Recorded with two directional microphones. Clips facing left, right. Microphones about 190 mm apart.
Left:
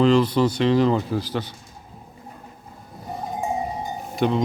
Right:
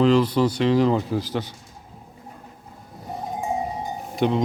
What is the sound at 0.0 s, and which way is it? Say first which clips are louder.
A man's voice: even; 10° right (ahead or behind).